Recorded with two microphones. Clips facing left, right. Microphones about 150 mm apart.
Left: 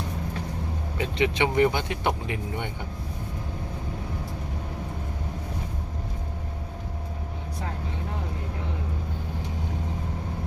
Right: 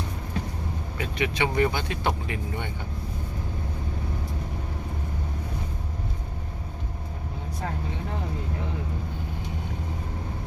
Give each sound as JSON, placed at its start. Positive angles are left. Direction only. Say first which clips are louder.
{"t": 0.9, "sound": "speech", "louder": "left 3 dB", "side_deg": 25}